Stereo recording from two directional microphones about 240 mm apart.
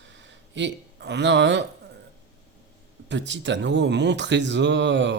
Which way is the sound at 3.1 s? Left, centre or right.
Right.